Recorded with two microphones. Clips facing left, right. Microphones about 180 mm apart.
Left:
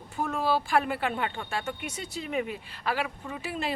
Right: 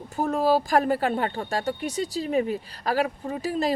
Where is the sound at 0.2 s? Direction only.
40° right (ahead or behind).